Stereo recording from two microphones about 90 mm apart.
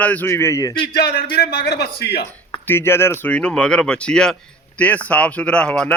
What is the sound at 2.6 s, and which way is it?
Speech, 25° left (ahead or behind).